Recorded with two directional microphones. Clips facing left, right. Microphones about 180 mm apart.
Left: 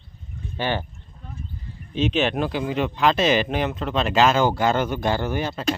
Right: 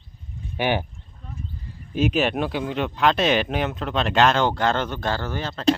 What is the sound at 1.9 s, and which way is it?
Speech, 5° right (ahead or behind).